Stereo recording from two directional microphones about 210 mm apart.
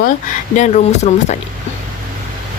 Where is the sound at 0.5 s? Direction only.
35° left (ahead or behind).